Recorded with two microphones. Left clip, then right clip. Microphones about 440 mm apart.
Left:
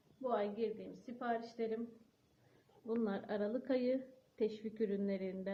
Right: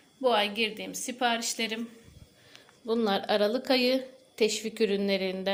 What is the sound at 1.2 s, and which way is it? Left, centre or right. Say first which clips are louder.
Speech: right 11 dB; left.